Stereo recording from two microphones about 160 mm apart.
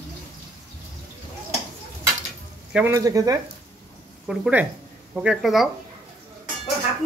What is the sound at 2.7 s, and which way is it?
Speech, 10° right (ahead or behind).